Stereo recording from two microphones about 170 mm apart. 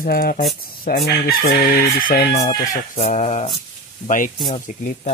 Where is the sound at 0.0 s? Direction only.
60° left (ahead or behind).